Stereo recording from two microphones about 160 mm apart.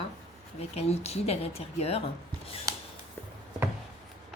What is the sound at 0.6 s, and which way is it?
Speech, 40° left (ahead or behind).